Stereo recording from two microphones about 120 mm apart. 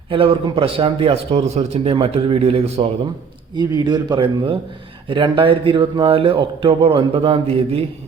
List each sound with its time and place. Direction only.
0.1 s a man's voice: 50° right (ahead or behind)
3.8 s a man's voice: 35° right (ahead or behind); by 7.9 s 55° right (ahead or behind)